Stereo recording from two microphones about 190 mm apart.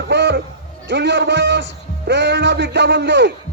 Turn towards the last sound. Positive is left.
turn(degrees=-65)  # may be behind; listen again after turning